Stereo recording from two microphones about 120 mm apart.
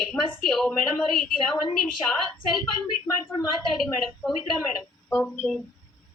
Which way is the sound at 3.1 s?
30° left (ahead or behind).